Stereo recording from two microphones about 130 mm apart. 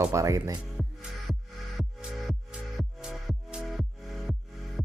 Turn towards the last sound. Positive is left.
turn(degrees=0)  # may be behind; listen again after turning